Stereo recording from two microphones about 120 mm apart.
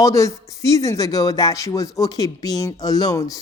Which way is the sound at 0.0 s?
25° left (ahead or behind).